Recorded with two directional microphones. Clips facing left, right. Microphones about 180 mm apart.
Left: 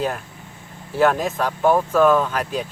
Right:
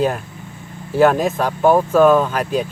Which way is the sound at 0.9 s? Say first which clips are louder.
Right 4 dB; 15° right (ahead or behind).